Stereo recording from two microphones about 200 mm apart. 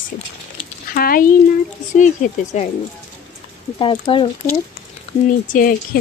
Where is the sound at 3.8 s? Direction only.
25° left (ahead or behind).